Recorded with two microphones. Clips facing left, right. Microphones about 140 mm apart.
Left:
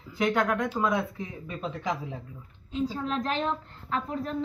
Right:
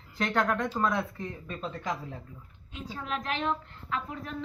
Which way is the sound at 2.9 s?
35° left (ahead or behind).